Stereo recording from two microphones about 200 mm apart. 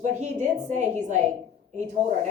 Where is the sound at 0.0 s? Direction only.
35° right (ahead or behind).